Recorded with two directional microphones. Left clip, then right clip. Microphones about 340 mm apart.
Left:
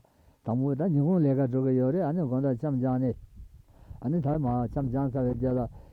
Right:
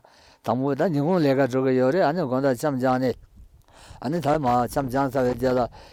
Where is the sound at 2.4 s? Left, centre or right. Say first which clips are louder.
Right 8 dB; centre.